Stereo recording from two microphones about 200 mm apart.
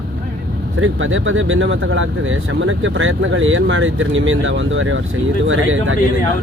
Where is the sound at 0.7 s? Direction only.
85° right.